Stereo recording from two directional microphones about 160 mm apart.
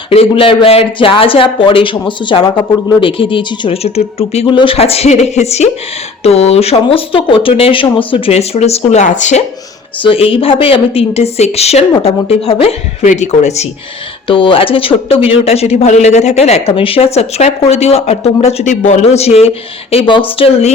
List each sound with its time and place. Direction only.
0.1 s speech: 35° left (ahead or behind)
10.0 s speech: 35° left (ahead or behind)
14.3 s speech: 30° left (ahead or behind)